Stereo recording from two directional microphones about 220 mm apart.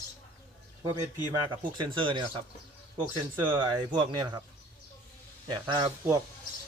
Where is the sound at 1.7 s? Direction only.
20° right (ahead or behind).